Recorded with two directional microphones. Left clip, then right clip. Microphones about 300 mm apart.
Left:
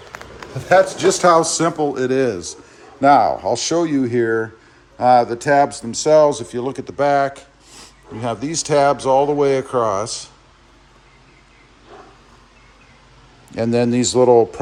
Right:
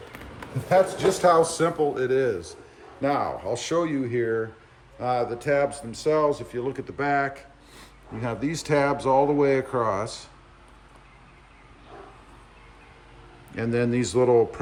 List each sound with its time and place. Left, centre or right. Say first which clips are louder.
0.7 s speech: left 7 dB; left; by 10.2 s centre
13.5 s speech: left 8 dB; centre